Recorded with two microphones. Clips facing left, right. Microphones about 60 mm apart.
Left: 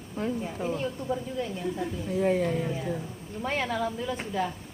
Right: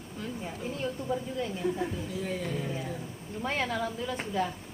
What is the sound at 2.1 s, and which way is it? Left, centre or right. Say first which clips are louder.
Speech: left 8 dB; left.